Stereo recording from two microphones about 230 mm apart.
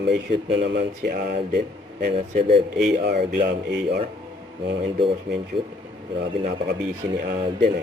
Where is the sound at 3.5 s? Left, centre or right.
Right.